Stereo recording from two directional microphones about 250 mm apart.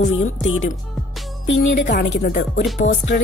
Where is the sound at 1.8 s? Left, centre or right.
Left.